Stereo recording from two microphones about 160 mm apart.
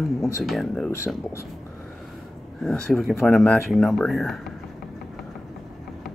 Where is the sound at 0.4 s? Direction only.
Centre (ahead or behind).